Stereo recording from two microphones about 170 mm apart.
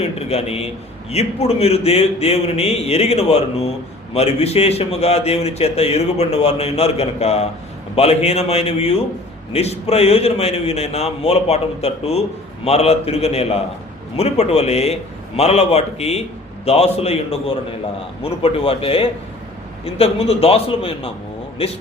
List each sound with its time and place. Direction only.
0.0 s a man's voice: 40° left (ahead or behind)